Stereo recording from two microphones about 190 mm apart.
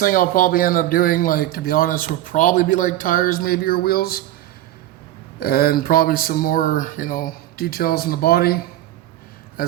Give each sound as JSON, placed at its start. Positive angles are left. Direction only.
{"t": 0.0, "sound": "speech", "side_deg": 45}
{"t": 5.4, "sound": "speech", "side_deg": 55}
{"t": 9.6, "sound": "speech", "side_deg": 50}